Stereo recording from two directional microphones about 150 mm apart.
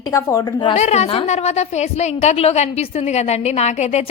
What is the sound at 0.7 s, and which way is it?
A woman's voice, 50° left (ahead or behind).